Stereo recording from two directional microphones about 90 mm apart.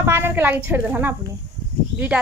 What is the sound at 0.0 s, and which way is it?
A woman's voice, 25° right (ahead or behind).